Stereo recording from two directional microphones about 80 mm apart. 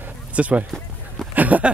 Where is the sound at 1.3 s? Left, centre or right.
Centre.